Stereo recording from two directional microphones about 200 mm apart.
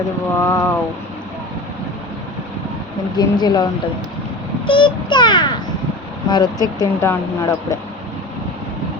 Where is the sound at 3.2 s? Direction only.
20° left (ahead or behind).